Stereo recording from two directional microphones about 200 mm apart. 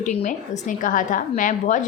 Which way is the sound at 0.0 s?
35° left (ahead or behind).